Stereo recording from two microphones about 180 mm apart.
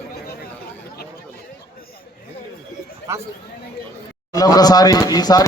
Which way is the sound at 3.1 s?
15° right (ahead or behind).